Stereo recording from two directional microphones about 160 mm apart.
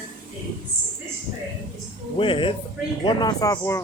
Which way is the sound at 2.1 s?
30° left (ahead or behind).